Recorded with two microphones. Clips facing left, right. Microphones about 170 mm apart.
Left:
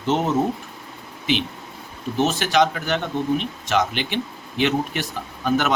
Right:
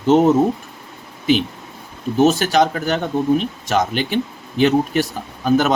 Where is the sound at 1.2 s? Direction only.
40° right (ahead or behind).